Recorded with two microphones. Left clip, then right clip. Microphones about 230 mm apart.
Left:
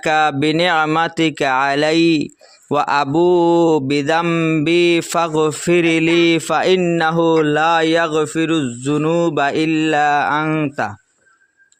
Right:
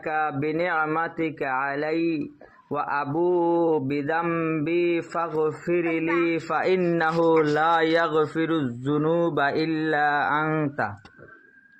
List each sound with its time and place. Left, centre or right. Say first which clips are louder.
0.0 s speech: left 11 dB; left
2.6 s mantra: left 10 dB; left
6.1 s speech: left 8 dB; centre
6.3 s speech: left 8 dB; left